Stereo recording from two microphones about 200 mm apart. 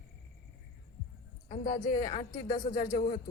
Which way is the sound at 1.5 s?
40° left (ahead or behind).